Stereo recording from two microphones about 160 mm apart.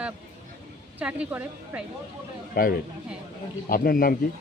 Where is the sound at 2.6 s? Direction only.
65° left (ahead or behind).